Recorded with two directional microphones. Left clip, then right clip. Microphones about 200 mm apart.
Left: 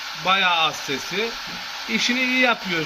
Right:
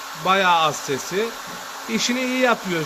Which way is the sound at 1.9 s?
55° right (ahead or behind).